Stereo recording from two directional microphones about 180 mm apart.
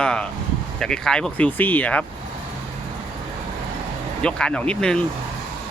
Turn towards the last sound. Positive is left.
turn(degrees=5)  # may be behind; listen again after turning